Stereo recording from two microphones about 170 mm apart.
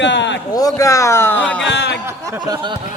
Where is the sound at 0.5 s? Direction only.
20° left (ahead or behind).